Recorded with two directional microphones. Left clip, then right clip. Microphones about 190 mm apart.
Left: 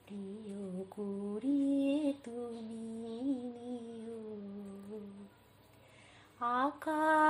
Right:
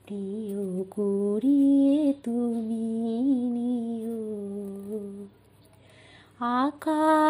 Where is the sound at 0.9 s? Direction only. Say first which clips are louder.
Right 17 dB; 40° right (ahead or behind).